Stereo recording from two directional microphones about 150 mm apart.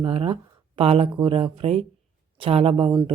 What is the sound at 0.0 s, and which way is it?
Speech, 35° right (ahead or behind).